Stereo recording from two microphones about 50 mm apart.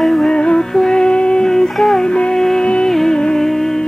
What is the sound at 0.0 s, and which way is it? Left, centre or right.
Music, centre.